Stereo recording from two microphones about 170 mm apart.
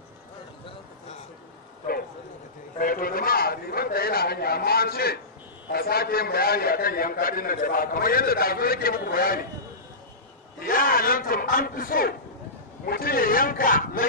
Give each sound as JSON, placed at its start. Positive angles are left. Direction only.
{"t": 2.8, "sound": "a man's voice", "side_deg": 55}
{"t": 10.6, "sound": "a man's voice", "side_deg": 60}